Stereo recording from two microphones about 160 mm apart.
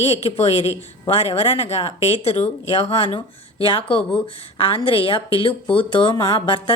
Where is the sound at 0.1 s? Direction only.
40° left (ahead or behind).